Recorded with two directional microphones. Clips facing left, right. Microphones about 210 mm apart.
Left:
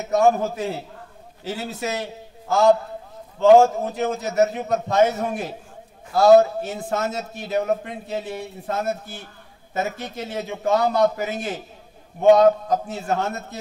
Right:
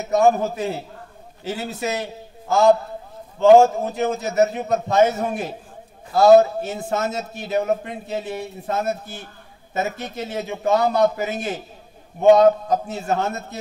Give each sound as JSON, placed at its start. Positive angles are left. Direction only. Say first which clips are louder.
{"t": 0.1, "sound": "a man's voice", "louder": "right 1 dB", "side_deg": -20}
{"t": 10.1, "sound": "a man's voice", "louder": "right 2 dB", "side_deg": -20}